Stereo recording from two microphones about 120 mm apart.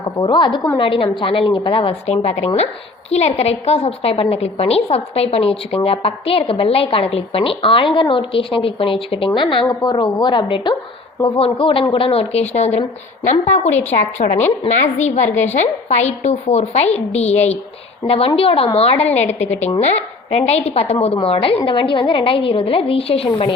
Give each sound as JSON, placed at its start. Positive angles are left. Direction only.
{"t": 0.0, "sound": "a woman's voice", "side_deg": 40}
{"t": 18.0, "sound": "a woman's voice", "side_deg": 50}
{"t": 19.5, "sound": "a woman's voice", "side_deg": 15}
{"t": 20.3, "sound": "a woman's voice", "side_deg": 60}